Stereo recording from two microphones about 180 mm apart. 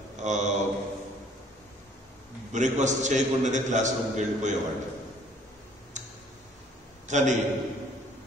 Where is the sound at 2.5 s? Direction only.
40° right (ahead or behind).